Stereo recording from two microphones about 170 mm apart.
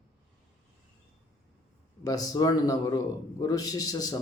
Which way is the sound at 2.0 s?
20° left (ahead or behind).